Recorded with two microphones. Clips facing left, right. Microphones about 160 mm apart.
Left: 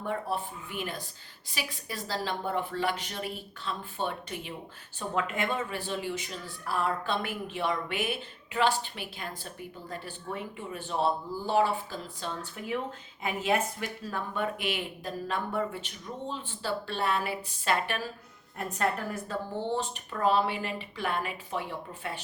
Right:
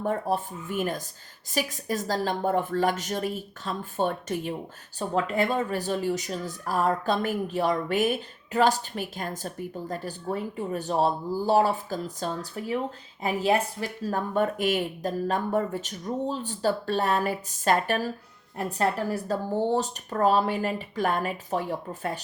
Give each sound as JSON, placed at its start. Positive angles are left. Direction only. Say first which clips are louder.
{"t": 0.0, "sound": "a woman's voice", "louder": "right 5 dB", "side_deg": -45}